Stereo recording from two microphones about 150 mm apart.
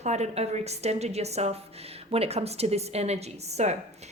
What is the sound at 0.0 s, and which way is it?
A woman's voice, 50° right (ahead or behind).